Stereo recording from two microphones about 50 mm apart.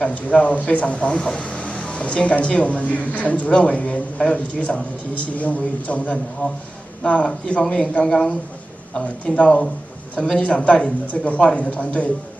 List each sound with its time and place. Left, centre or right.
0.0 s a man's voice: left
8.9 s speech: left